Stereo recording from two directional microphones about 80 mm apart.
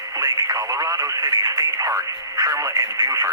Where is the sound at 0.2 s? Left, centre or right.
Right.